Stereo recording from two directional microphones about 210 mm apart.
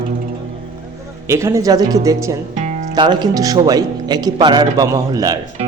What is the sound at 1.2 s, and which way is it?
A man's voice, 15° right (ahead or behind).